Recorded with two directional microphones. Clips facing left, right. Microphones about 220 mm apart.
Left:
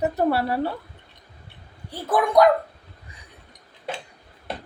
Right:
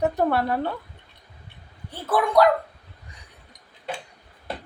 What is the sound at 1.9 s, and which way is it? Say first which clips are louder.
Speech: left 1 dB; 15° left (ahead or behind).